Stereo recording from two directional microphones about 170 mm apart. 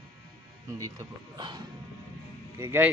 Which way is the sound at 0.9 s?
25° right (ahead or behind).